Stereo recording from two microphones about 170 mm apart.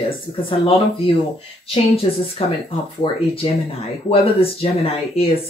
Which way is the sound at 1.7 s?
35° left (ahead or behind).